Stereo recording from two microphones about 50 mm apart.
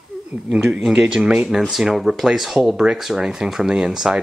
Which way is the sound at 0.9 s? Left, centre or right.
Centre.